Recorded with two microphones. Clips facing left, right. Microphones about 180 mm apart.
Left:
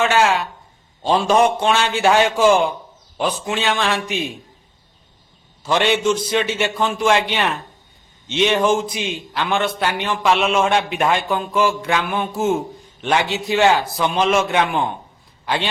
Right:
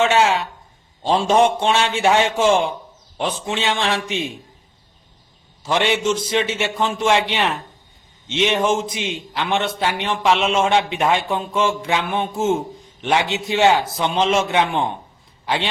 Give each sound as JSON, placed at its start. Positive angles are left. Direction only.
{"t": 0.0, "sound": "a man's voice", "side_deg": -25}
{"t": 5.6, "sound": "a man's voice", "side_deg": -20}